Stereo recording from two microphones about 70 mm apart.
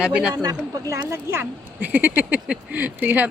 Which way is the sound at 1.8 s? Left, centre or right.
Right.